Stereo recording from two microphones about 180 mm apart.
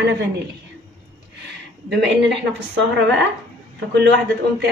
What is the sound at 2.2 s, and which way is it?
Speech, 80° right.